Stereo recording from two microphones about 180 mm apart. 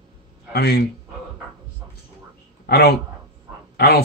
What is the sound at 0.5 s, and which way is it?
Speech, 65° left (ahead or behind).